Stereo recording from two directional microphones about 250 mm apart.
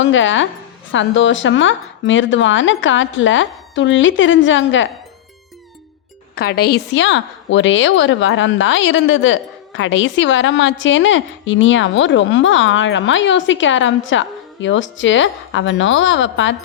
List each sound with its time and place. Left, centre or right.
0.0 s a woman's voice: left
6.3 s a woman's voice: left